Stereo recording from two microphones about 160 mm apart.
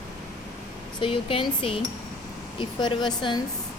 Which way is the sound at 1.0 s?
30° left (ahead or behind).